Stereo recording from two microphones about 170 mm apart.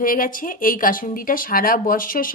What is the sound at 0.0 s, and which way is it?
A woman's voice, 55° left (ahead or behind).